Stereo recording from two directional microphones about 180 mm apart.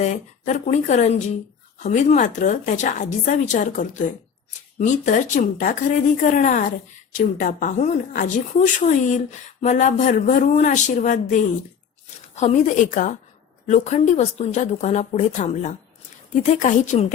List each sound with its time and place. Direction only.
0.0 s speech: 40° left (ahead or behind)
12.4 s speech: 40° left (ahead or behind)